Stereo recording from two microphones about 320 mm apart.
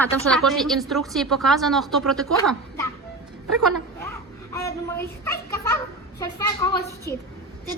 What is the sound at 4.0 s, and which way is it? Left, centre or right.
A child's voice, centre.